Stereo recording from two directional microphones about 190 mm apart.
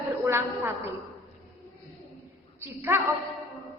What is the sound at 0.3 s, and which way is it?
Speech, 15° right (ahead or behind).